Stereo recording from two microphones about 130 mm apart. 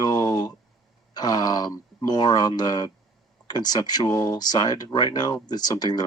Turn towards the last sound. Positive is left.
turn(degrees=30)  # may be behind; listen again after turning